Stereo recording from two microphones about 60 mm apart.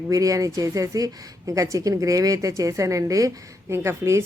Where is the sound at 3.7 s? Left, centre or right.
Right.